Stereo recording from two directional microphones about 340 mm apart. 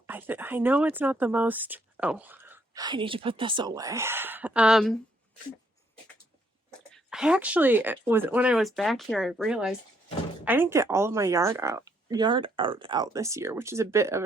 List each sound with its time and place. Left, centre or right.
0.1 s speech: centre
6.9 s speech: centre